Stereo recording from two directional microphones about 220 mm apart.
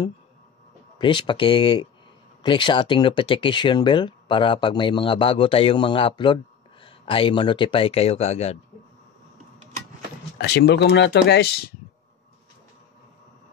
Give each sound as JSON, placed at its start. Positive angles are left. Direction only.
{"t": 0.9, "sound": "speech", "side_deg": 20}
{"t": 10.3, "sound": "speech", "side_deg": 50}